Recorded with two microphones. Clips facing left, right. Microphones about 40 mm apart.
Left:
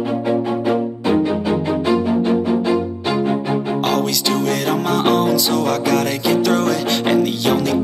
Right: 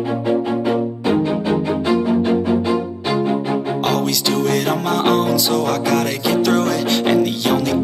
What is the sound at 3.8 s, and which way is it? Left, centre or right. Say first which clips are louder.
Music: even; centre.